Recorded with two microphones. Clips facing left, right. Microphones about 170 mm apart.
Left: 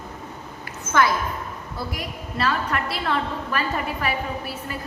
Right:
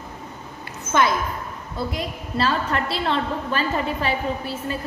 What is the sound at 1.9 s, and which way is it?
A woman's voice, 25° right (ahead or behind).